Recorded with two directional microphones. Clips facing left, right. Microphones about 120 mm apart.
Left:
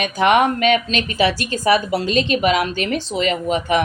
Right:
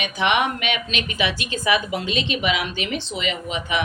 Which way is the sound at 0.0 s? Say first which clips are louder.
Left 6 dB; 40° left (ahead or behind).